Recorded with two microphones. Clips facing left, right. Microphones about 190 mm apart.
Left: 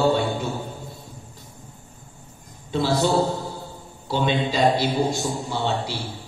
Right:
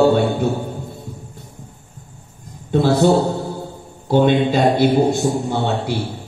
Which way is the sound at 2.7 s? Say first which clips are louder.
Right 7 dB; 55° right (ahead or behind).